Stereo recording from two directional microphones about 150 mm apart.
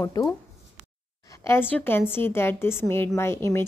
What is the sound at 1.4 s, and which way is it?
A woman's voice, 15° left (ahead or behind).